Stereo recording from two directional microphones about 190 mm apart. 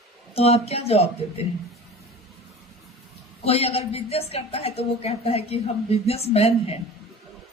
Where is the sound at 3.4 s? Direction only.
30° left (ahead or behind).